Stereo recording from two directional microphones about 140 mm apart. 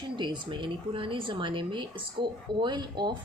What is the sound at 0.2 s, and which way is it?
Speech, 35° right (ahead or behind).